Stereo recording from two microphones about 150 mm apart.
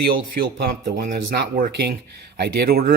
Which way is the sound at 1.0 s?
75° right (ahead or behind).